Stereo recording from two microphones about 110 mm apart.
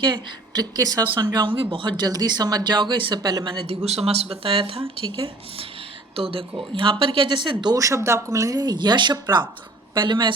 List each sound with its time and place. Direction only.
0.0 s speech: 45° right (ahead or behind)
3.8 s speech: 70° right (ahead or behind); by 7.5 s 45° right (ahead or behind)
7.6 s speech: 35° right (ahead or behind)